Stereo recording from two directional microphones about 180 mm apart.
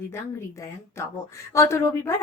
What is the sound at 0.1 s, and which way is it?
A woman's voice, 15° left (ahead or behind).